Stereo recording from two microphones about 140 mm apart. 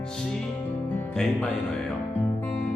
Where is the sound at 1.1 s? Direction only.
5° left (ahead or behind).